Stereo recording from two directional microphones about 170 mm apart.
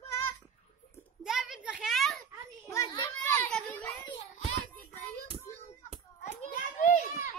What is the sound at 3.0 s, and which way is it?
Children playing, 10° left (ahead or behind).